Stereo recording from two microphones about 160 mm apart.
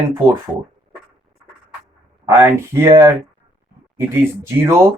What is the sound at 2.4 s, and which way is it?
Speech, 15° right (ahead or behind).